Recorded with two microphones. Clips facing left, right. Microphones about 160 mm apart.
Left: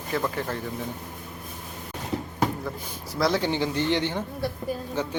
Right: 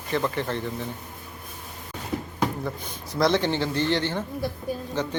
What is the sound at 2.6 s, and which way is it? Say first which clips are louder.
A man's voice: right 1 dB; 5° left (ahead or behind).